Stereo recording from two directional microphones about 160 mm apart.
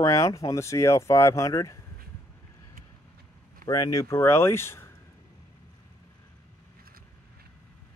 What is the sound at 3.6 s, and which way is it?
Speech, 20° left (ahead or behind).